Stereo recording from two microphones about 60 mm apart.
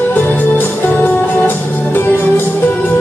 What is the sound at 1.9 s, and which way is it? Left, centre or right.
Music, left.